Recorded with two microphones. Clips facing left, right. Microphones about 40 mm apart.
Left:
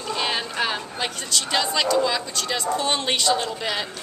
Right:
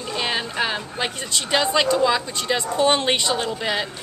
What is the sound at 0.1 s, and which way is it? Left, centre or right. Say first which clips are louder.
Speech: right 1 dB; centre.